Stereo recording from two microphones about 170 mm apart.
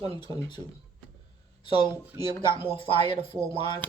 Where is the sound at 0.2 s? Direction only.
25° left (ahead or behind).